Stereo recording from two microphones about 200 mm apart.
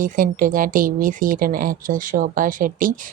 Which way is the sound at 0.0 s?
45° right (ahead or behind).